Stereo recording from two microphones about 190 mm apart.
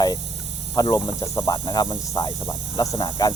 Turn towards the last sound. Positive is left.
turn(degrees=20)  # may be behind; listen again after turning